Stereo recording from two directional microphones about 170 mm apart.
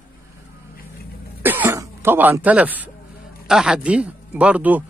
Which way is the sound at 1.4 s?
10° right (ahead or behind).